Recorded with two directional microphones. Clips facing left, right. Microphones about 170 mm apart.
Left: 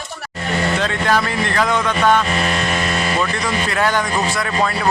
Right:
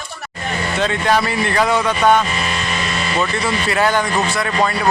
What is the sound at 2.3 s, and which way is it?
Vehicle, 50° left (ahead or behind).